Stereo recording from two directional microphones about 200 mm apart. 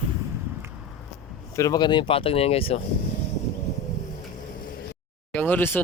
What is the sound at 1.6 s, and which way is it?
Speech, 20° left (ahead or behind).